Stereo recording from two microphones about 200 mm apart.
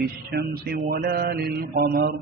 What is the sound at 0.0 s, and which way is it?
A man's voice, 50° right (ahead or behind).